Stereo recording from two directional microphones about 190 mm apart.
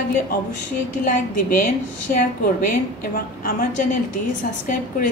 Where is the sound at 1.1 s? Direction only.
45° left (ahead or behind).